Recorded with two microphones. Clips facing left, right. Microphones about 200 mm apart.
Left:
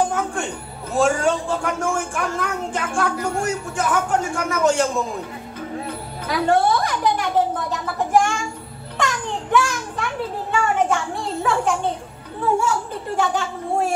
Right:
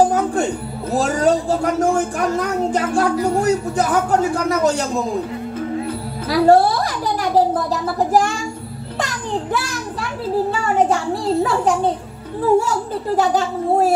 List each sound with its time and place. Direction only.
0.0 s music: 35° right (ahead or behind)
0.9 s speech: 35° right (ahead or behind)
6.2 s a sound: 35° right (ahead or behind)
12.5 s speech: 35° right (ahead or behind)